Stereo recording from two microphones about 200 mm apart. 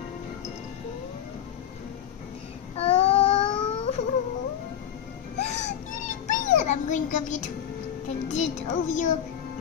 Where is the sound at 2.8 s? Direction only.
30° left (ahead or behind).